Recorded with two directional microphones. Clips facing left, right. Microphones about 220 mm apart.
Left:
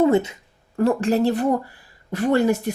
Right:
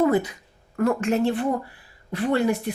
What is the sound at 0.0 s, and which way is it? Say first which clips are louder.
A woman's voice: left 3 dB; 25° left (ahead or behind).